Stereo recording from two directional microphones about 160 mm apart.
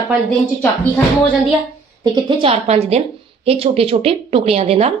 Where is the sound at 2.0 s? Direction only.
30° right (ahead or behind).